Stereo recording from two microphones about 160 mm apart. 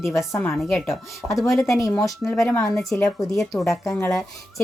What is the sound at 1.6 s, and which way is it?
Speech, 20° left (ahead or behind).